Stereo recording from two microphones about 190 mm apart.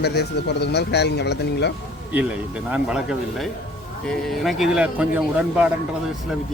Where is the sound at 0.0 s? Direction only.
60° left (ahead or behind).